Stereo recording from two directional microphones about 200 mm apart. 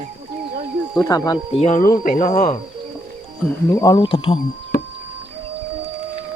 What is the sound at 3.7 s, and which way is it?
Speech, 20° left (ahead or behind).